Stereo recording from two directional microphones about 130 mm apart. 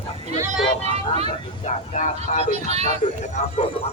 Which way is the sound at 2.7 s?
55° right (ahead or behind).